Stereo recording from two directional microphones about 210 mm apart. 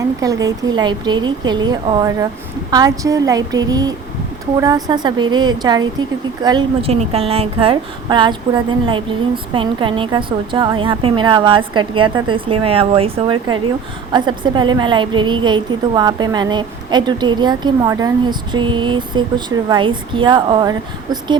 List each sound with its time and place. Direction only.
0.2 s a woman's voice: 15° right (ahead or behind)